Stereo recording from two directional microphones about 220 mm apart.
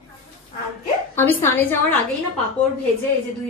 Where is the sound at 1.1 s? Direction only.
10° left (ahead or behind).